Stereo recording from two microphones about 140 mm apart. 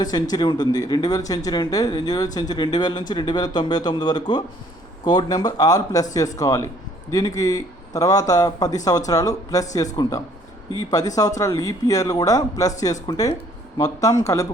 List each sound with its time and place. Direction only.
0.0 s speech: 30° left (ahead or behind)